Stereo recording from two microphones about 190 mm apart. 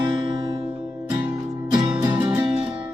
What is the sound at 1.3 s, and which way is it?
Music, 20° right (ahead or behind).